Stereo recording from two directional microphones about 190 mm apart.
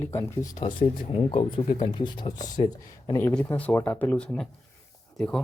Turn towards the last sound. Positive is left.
turn(degrees=0)  # may be behind; listen again after turning